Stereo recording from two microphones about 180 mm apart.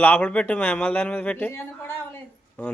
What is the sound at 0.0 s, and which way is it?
A man's voice, 10° left (ahead or behind).